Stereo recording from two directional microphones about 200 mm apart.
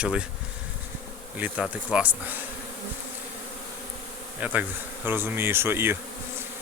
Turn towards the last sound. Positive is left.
turn(degrees=-10)  # may be behind; listen again after turning